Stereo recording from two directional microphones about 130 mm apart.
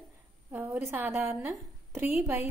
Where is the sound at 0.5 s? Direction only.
20° right (ahead or behind).